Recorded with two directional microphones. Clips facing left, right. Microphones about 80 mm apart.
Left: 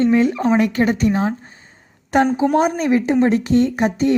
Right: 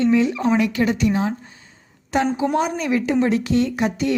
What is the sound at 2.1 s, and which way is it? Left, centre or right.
A woman's voice, left.